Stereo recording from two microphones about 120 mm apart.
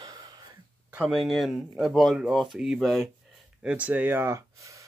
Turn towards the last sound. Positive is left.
turn(degrees=-25)  # may be behind; listen again after turning